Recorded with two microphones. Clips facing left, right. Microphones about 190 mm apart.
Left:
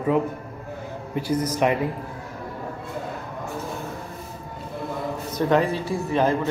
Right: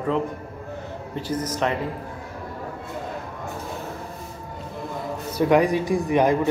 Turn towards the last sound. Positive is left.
turn(degrees=-15)  # may be behind; listen again after turning